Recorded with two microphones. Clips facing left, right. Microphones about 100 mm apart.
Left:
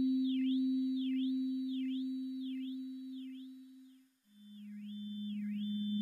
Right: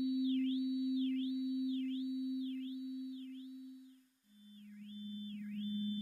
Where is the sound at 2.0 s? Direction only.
20° right (ahead or behind).